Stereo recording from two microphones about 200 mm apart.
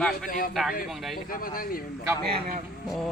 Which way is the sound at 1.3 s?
45° left (ahead or behind).